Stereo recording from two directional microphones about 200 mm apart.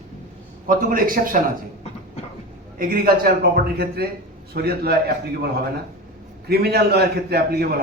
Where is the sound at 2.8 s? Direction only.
45° right (ahead or behind).